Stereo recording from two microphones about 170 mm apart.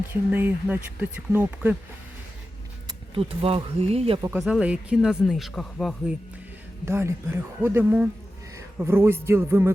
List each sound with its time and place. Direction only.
0.1 s speech: 10° right (ahead or behind)
2.8 s speech: 35° right (ahead or behind)
4.2 s speech: 10° right (ahead or behind)
6.8 s a man's voice: 15° right (ahead or behind)